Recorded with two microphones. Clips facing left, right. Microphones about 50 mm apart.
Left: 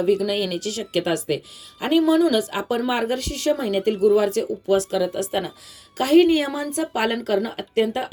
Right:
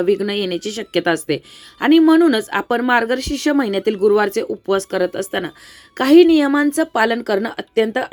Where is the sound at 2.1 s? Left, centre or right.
Right.